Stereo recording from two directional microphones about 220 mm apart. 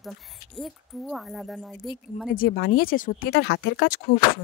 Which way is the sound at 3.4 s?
50° left (ahead or behind).